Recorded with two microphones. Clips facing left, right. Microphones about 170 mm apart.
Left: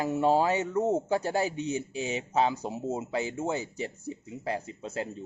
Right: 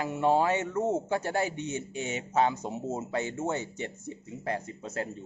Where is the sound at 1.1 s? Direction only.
15° left (ahead or behind).